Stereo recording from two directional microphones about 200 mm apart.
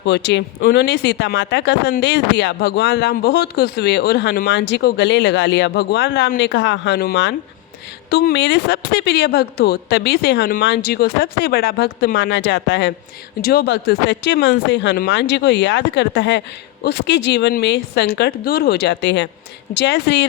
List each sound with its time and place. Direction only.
0.0 s speech: 60° left (ahead or behind)